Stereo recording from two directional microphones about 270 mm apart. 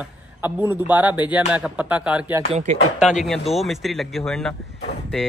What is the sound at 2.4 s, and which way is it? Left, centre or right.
Speech, right.